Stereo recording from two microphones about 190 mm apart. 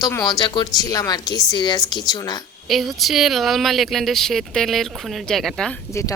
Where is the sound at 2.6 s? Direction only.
Centre (ahead or behind).